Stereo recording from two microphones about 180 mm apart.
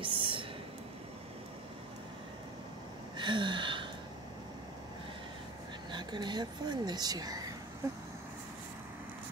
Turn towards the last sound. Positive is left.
turn(degrees=-15)  # may be behind; listen again after turning